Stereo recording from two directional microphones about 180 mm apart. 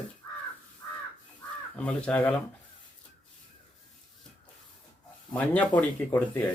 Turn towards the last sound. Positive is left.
turn(degrees=10)  # may be behind; listen again after turning